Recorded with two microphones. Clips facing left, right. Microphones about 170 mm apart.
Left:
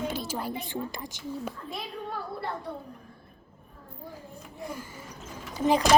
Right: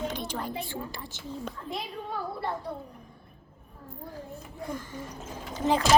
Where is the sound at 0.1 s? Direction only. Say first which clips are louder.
Left 1 dB; 5° left (ahead or behind).